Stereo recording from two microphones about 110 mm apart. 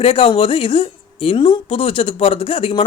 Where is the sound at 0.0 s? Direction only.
60° left (ahead or behind).